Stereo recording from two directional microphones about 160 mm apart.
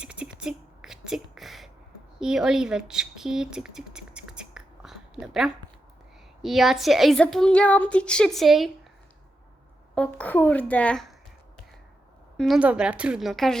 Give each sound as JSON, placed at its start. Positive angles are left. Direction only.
{"t": 0.0, "sound": "a sound", "side_deg": -5}
{"t": 6.4, "sound": "a woman's voice", "side_deg": 0}
{"t": 9.9, "sound": "speech", "side_deg": 5}
{"t": 12.4, "sound": "a woman's voice", "side_deg": -5}